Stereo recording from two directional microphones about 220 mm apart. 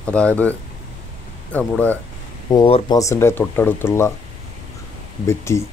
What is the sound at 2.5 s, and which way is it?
Speech, 20° left (ahead or behind).